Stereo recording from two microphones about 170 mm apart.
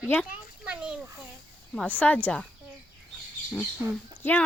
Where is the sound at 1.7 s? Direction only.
10° left (ahead or behind).